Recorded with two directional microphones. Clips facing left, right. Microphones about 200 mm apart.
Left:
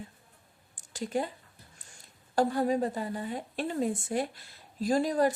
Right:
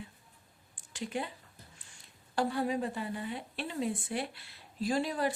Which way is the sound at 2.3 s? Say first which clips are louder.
Left 5 dB; 45° left (ahead or behind).